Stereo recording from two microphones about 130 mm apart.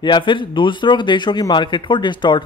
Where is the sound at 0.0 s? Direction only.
40° left (ahead or behind).